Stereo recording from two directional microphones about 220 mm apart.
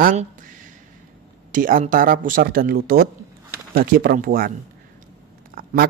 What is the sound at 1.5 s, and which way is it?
Speech, 40° right (ahead or behind).